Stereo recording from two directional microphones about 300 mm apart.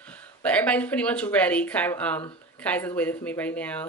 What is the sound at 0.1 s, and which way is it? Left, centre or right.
Speech, centre.